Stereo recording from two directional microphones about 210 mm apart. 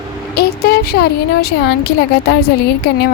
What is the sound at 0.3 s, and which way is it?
A woman's voice, 50° left (ahead or behind).